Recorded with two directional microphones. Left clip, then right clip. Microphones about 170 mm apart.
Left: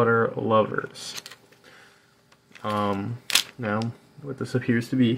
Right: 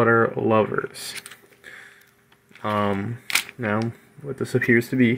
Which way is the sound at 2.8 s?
10° right (ahead or behind).